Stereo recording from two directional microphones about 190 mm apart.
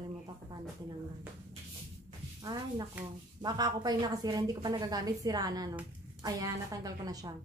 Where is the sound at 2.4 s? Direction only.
20° right (ahead or behind).